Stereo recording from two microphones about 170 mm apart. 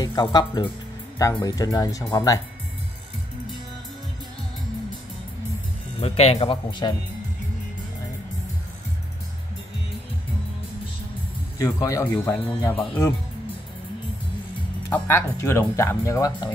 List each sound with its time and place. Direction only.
0.0 s speech: 25° left (ahead or behind)
5.9 s speech: 35° left (ahead or behind)
11.5 s speech: 20° left (ahead or behind)
14.9 s speech: 15° left (ahead or behind)